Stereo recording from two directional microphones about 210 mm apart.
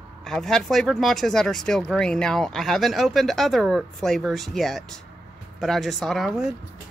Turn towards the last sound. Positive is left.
turn(degrees=0)  # may be behind; listen again after turning